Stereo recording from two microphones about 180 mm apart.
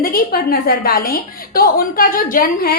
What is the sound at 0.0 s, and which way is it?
A woman's voice, 55° left (ahead or behind).